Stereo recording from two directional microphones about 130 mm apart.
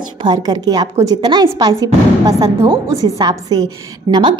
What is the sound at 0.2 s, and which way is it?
A woman's voice, 35° right (ahead or behind).